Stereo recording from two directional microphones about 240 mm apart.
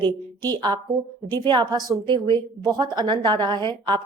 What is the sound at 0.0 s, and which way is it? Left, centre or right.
A woman's voice, centre.